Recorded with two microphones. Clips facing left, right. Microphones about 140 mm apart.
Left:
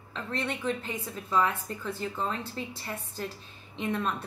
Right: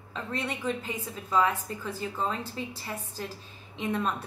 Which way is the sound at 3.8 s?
5° right (ahead or behind).